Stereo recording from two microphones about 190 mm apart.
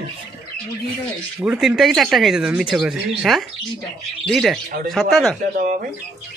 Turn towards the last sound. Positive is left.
turn(degrees=-45)  # may be behind; listen again after turning